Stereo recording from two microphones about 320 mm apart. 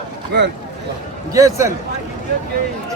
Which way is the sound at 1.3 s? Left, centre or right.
Centre.